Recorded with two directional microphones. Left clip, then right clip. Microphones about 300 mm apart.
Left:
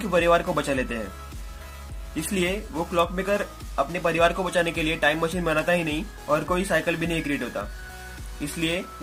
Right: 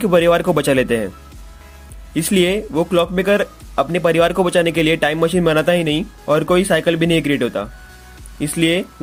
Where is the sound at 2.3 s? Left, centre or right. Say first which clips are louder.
Right 11 dB; right.